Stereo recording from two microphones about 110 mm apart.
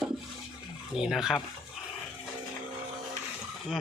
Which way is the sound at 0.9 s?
5° right (ahead or behind).